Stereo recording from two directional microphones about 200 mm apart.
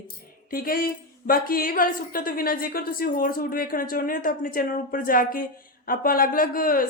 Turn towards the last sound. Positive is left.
turn(degrees=45)  # may be behind; listen again after turning